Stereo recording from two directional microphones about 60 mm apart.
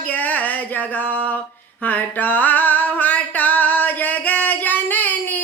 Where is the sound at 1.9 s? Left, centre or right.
Left.